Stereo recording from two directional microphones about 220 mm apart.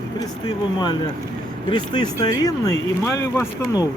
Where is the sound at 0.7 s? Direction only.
20° left (ahead or behind).